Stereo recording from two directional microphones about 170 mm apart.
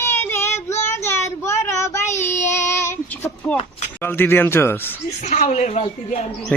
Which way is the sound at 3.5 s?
35° left (ahead or behind).